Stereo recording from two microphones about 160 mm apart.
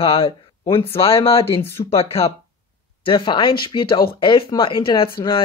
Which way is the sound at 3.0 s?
30° left (ahead or behind).